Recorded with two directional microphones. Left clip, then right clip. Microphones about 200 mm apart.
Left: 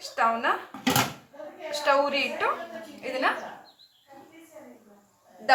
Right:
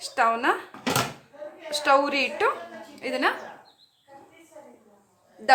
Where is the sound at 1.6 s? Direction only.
65° right (ahead or behind).